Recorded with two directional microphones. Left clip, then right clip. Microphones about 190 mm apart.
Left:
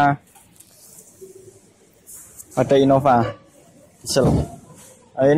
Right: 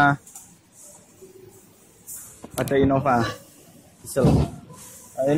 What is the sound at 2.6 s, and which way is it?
Speech, 25° left (ahead or behind).